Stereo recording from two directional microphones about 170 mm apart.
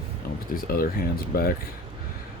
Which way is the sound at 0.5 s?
60° left (ahead or behind).